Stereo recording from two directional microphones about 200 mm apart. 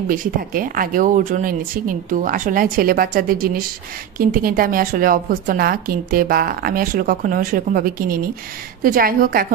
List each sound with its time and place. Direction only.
0.1 s a woman's voice: 45° right (ahead or behind)